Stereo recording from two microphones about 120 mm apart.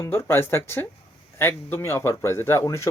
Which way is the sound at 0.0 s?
20° left (ahead or behind).